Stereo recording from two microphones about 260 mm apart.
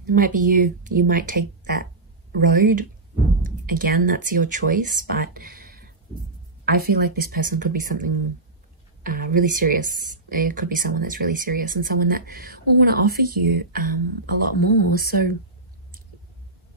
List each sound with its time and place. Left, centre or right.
0.0 s speech: right
9.0 s speech: right